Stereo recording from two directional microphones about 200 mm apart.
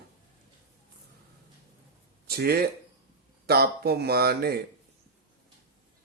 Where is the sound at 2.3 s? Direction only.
55° right (ahead or behind).